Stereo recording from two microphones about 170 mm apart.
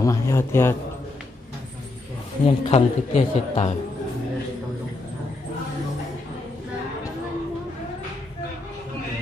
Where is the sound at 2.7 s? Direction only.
45° left (ahead or behind).